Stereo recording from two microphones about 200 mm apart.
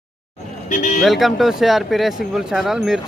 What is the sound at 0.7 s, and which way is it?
Speech, 40° left (ahead or behind).